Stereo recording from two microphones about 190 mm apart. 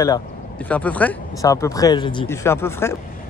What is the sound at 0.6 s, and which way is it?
Speech, 5° left (ahead or behind).